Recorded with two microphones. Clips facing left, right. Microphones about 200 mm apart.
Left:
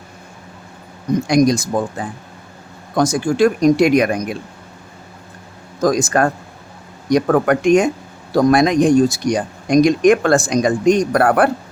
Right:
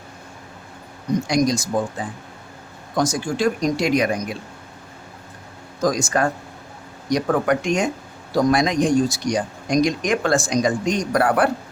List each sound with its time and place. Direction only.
1.3 s speech: 55° left (ahead or behind)
5.8 s speech: 55° left (ahead or behind)